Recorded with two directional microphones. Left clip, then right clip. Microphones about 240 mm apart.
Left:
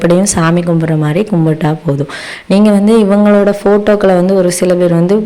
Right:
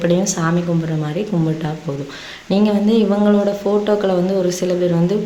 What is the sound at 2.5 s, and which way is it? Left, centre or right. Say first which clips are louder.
Speech: left 8 dB; left.